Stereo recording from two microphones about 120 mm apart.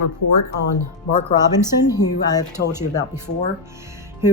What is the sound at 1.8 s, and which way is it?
Speech, 30° left (ahead or behind).